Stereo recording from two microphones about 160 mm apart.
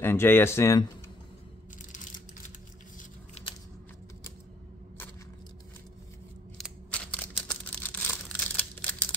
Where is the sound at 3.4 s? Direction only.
40° left (ahead or behind).